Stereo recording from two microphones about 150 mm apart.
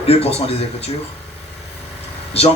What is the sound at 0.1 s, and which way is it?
Speech, 45° left (ahead or behind).